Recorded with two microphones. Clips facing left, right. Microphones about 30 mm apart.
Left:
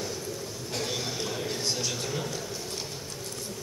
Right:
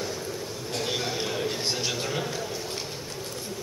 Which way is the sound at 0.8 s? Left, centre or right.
Centre.